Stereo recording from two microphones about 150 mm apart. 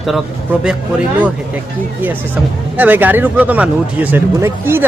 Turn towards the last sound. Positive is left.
turn(degrees=-15)  # may be behind; listen again after turning